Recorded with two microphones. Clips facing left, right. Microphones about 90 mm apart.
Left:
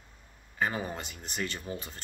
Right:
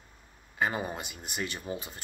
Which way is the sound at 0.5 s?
15° right (ahead or behind).